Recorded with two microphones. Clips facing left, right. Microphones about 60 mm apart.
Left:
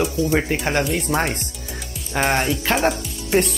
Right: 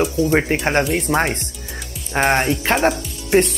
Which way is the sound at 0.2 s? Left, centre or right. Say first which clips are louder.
Right 4 dB; right.